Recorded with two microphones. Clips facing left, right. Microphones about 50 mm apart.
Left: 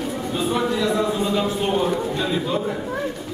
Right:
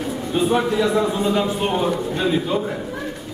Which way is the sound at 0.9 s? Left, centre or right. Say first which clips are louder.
Right 2 dB; centre.